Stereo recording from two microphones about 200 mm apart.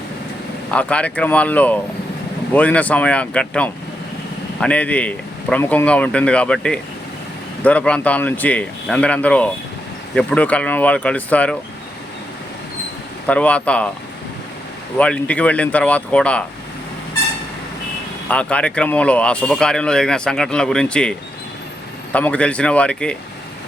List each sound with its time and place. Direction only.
0.7 s a man's voice: 5° left (ahead or behind)
13.2 s a man's voice: 5° left (ahead or behind)
14.9 s a man's voice: 5° left (ahead or behind)
18.3 s speech: 5° left (ahead or behind)